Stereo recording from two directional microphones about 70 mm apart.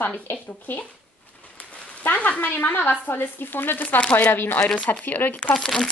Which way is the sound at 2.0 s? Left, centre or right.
Left.